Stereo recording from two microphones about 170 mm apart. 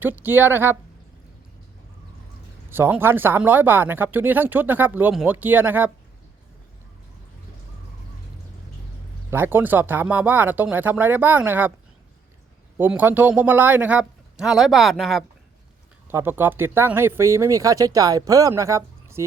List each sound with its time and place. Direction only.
0.0 s speech: 10° right (ahead or behind)
2.6 s speech: 10° right (ahead or behind)
9.3 s speech: 15° right (ahead or behind)
12.7 s speech: 10° right (ahead or behind)
16.0 s speech: 10° right (ahead or behind)